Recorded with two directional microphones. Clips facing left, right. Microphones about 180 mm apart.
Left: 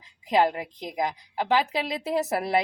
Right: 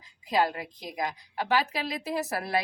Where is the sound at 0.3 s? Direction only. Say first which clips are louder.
Left 4 dB; 20° left (ahead or behind).